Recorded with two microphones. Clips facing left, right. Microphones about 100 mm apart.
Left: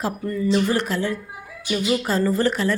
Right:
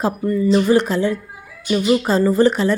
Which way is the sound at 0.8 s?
20° right (ahead or behind).